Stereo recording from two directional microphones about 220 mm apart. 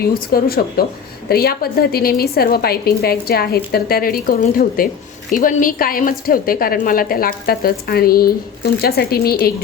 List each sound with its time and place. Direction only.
0.0 s a woman's voice: 40° left (ahead or behind)